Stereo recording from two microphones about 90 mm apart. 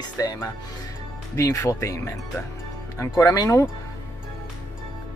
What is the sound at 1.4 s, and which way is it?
Speech, 35° left (ahead or behind).